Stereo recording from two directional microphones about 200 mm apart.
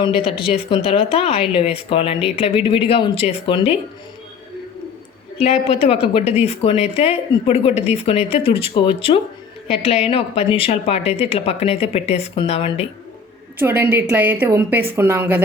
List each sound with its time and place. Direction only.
0.3 s speech: 25° left (ahead or behind)
5.4 s a woman's voice: 30° left (ahead or behind)
13.6 s a woman's voice: 10° right (ahead or behind)